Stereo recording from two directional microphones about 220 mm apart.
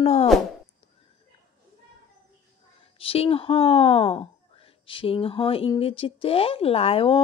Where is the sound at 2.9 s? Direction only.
25° left (ahead or behind).